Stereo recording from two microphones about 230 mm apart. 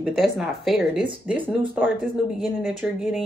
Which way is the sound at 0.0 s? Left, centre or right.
Centre.